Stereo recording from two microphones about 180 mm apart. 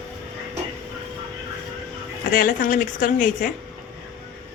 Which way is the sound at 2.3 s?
50° left (ahead or behind).